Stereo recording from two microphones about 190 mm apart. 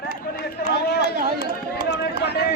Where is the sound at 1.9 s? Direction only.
60° left (ahead or behind).